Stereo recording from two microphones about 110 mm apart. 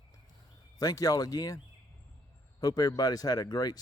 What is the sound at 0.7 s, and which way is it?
Speech, 35° left (ahead or behind).